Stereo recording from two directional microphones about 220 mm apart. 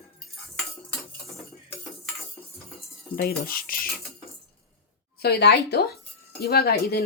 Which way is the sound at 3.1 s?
45° left (ahead or behind).